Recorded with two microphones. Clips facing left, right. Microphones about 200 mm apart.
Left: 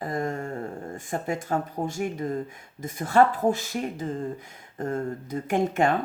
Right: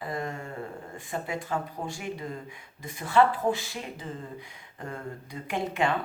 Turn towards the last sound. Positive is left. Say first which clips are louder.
# left 5 dB
turn(degrees=45)  # may be behind; listen again after turning